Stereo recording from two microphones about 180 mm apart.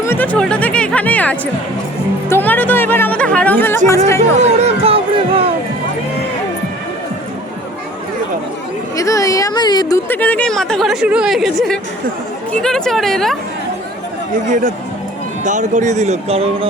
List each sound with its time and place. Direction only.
0.0 s music: 10° left (ahead or behind)
2.3 s speech: 10° left (ahead or behind)
4.4 s a sound: 35° right (ahead or behind)
9.0 s a woman's voice: 20° left (ahead or behind)
10.1 s a woman's voice: 10° left (ahead or behind)
15.4 s speech: 45° right (ahead or behind)